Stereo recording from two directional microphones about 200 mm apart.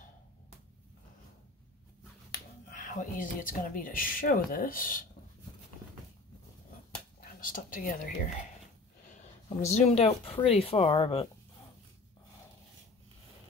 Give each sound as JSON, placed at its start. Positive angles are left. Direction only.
{"t": 2.7, "sound": "speech", "side_deg": 40}
{"t": 7.2, "sound": "speech", "side_deg": 45}